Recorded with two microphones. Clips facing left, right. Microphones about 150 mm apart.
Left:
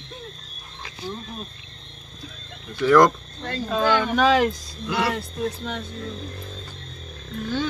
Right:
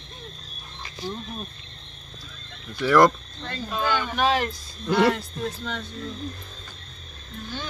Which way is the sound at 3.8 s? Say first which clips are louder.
Left 4 dB; 85° left.